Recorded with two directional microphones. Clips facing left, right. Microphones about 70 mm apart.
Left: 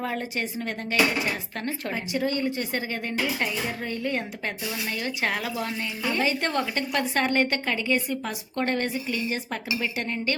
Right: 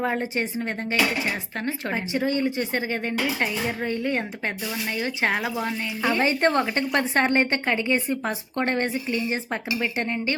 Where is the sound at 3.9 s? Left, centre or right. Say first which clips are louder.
Right 3 dB; right.